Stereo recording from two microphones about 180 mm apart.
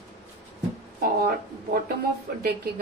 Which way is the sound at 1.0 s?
55° right (ahead or behind).